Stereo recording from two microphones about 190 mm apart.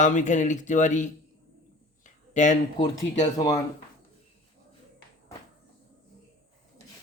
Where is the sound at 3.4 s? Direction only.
15° left (ahead or behind).